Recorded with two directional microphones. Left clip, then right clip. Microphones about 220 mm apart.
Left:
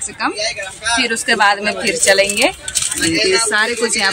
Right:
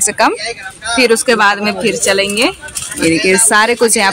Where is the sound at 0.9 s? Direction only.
25° right (ahead or behind).